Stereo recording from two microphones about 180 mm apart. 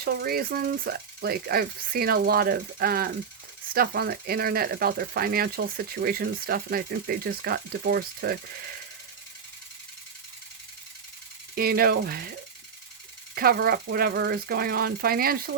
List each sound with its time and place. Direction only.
0.0 s speech: 55° right (ahead or behind)
11.5 s speech: 55° right (ahead or behind)
13.3 s speech: 55° right (ahead or behind)